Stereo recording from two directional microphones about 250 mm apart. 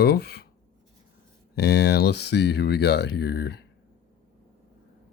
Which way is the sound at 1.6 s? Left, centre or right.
Left.